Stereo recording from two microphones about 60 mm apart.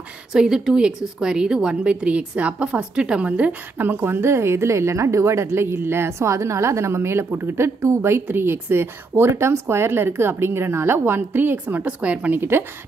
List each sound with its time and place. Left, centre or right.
0.3 s a woman's voice: centre; by 11.6 s right
11.6 s speech: right
12.4 s speech: right